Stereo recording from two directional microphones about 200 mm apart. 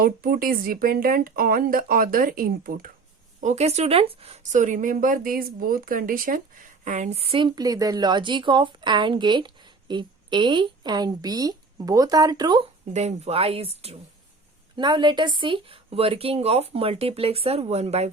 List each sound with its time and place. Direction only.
0.0 s speech: 45° right (ahead or behind)
3.4 s speech: 35° right (ahead or behind)
12.9 s speech: 35° right (ahead or behind)